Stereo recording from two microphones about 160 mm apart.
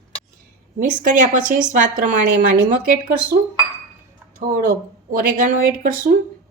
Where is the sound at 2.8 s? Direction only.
70° right (ahead or behind).